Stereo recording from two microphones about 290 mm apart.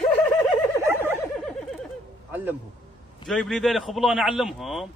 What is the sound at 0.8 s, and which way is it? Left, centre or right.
Neigh, centre.